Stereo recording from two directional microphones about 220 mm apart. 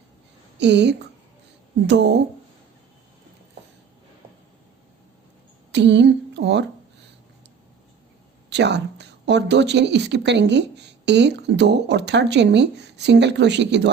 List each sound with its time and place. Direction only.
0.6 s a woman's voice: 50° right (ahead or behind)
5.7 s a sound: 50° right (ahead or behind)
8.4 s a woman's voice: 50° right (ahead or behind)